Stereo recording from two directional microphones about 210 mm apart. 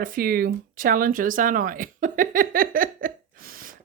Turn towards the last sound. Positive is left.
turn(degrees=-45)  # may be behind; listen again after turning